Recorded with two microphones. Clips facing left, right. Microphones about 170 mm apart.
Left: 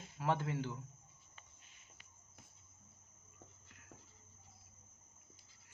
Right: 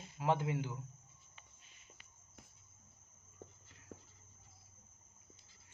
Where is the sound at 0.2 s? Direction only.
15° right (ahead or behind).